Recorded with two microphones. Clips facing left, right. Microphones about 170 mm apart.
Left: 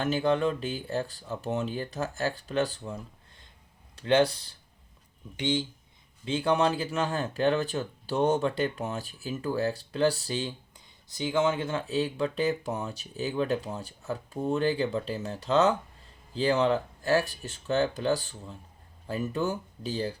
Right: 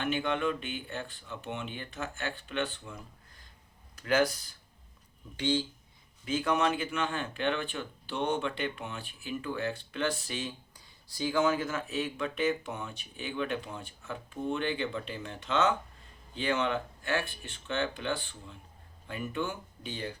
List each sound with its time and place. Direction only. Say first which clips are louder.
0.0 s speech: left 5 dB; 35° left (ahead or behind)
5.4 s speech: left 1 dB; 20° left (ahead or behind)
6.2 s speech: left 3 dB; 30° left (ahead or behind)
11.1 s speech: left 2 dB; 20° left (ahead or behind)